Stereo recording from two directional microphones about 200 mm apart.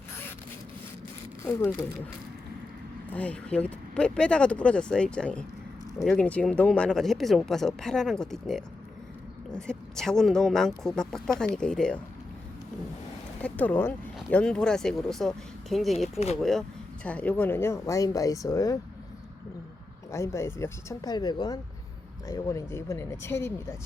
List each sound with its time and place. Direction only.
1.5 s speech: 10° left (ahead or behind)
3.1 s speech: 5° left (ahead or behind)
13.4 s speech: 10° left (ahead or behind)
20.1 s speech: 15° left (ahead or behind)